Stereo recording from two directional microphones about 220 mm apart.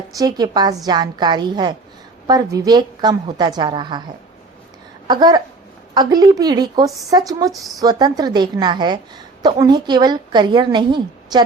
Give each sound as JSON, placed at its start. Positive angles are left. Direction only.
{"t": 0.2, "sound": "a woman's voice", "side_deg": -20}
{"t": 5.0, "sound": "a woman's voice", "side_deg": -20}